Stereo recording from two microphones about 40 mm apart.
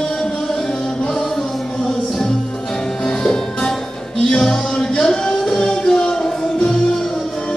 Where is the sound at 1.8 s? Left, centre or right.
Centre.